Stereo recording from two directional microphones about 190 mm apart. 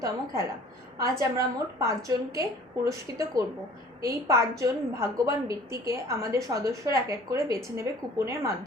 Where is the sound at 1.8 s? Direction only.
15° right (ahead or behind).